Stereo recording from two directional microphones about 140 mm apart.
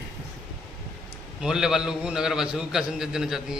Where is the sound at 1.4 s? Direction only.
5° right (ahead or behind).